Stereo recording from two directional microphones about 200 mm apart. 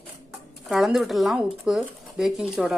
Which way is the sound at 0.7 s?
Centre (ahead or behind).